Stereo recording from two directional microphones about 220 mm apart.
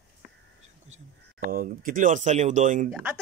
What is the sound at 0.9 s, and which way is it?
Speech, 40° right (ahead or behind).